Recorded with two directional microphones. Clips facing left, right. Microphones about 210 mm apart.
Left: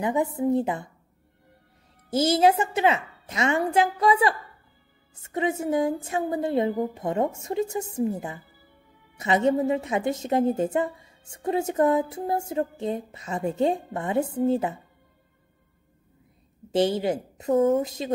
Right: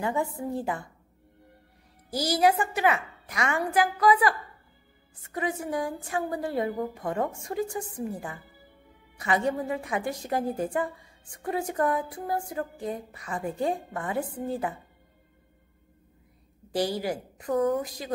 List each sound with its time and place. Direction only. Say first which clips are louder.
0.0 s a woman's voice: left 5 dB; 20° left (ahead or behind)
2.0 s a woman's voice: left 4 dB; 25° left (ahead or behind)
16.7 s a woman's voice: left 5 dB; 25° left (ahead or behind)